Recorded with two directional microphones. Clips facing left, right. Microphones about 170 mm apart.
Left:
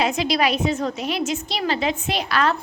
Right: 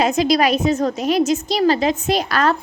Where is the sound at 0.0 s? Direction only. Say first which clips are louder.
Right 5 dB; 45° right (ahead or behind).